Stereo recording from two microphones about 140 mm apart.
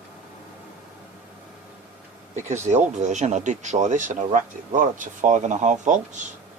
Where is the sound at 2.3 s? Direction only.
55° right (ahead or behind).